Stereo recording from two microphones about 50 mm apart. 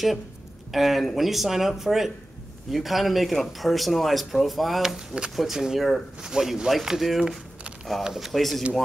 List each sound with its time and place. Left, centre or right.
0.7 s speech: centre
4.8 s speech: centre
5.3 s speech: centre
8.3 s speech: centre